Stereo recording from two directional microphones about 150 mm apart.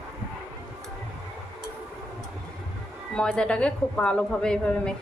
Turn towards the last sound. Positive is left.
turn(degrees=5)  # may be behind; listen again after turning